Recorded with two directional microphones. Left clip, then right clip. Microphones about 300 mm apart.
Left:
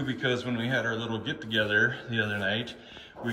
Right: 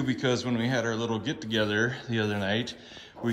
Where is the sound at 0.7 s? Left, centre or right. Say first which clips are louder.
Left 1 dB; right.